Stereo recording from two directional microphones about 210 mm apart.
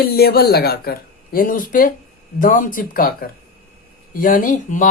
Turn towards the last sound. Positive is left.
turn(degrees=40)  # may be behind; listen again after turning